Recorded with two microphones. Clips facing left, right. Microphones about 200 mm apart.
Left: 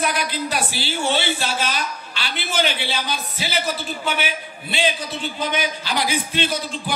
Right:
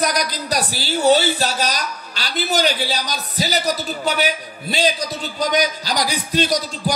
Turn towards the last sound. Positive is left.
turn(degrees=-40)  # may be behind; listen again after turning